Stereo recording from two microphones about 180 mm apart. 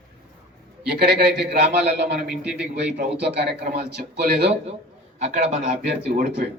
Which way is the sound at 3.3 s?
65° right (ahead or behind).